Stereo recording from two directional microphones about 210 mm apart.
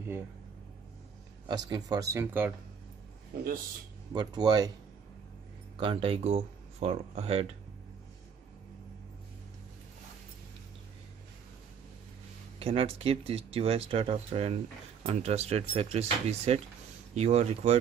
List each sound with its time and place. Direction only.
1.5 s speech: 20° right (ahead or behind)
4.1 s speech: 20° right (ahead or behind)
5.8 s speech: 25° right (ahead or behind)
12.5 s speech: 25° right (ahead or behind)